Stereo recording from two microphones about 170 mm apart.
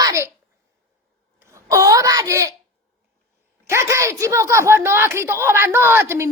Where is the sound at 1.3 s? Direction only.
15° right (ahead or behind).